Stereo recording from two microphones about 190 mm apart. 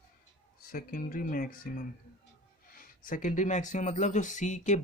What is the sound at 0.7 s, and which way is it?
Speech, 50° left (ahead or behind).